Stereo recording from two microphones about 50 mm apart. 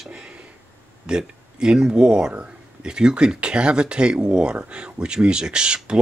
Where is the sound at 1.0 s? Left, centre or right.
Centre.